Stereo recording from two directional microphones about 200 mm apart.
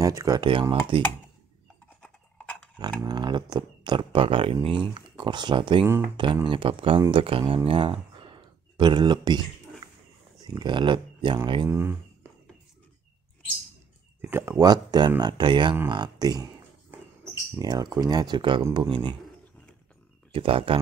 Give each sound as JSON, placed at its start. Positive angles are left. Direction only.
{"t": 0.0, "sound": "speech", "side_deg": -15}
{"t": 2.0, "sound": "a sound", "side_deg": 5}
{"t": 3.0, "sound": "speech", "side_deg": -20}
{"t": 10.4, "sound": "speech", "side_deg": -20}
{"t": 11.7, "sound": "speech", "side_deg": -10}
{"t": 14.2, "sound": "speech", "side_deg": -15}
{"t": 17.6, "sound": "speech", "side_deg": -20}
{"t": 20.3, "sound": "speech", "side_deg": -25}